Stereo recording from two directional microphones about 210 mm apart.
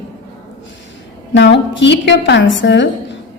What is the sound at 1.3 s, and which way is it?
A woman's voice, 55° left (ahead or behind).